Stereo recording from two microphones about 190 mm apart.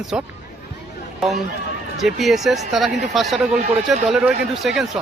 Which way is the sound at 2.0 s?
Centre (ahead or behind).